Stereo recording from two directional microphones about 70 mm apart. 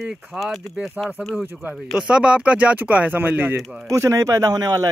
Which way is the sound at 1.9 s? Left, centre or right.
Centre.